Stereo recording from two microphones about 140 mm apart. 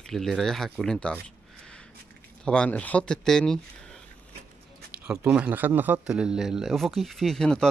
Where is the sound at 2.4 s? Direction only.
5° left (ahead or behind).